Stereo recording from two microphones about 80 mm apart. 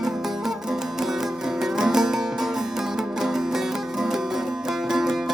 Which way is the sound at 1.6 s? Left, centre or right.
Centre.